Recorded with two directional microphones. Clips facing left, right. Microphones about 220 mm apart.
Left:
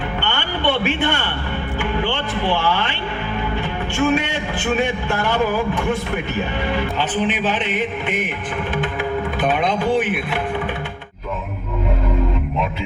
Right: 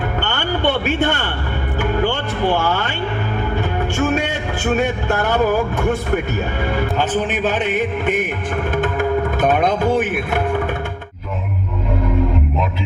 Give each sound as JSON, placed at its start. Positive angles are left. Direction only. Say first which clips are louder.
{"t": 0.2, "sound": "a sound", "louder": "right 4 dB", "side_deg": -45}
{"t": 1.8, "sound": "music", "louder": "right 4 dB", "side_deg": -45}
{"t": 3.9, "sound": "speech", "louder": "left 2 dB", "side_deg": -45}